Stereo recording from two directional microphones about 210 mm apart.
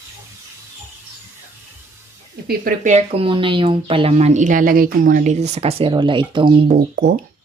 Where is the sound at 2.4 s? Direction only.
40° right (ahead or behind); by 6.6 s 20° right (ahead or behind).